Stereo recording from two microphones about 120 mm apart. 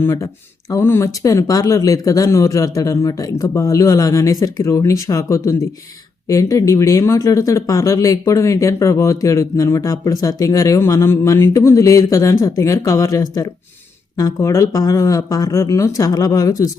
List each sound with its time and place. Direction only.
0.0 s speech: 25° left (ahead or behind)